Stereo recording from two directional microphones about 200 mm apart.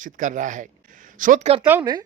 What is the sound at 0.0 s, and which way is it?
Speech, 40° right (ahead or behind).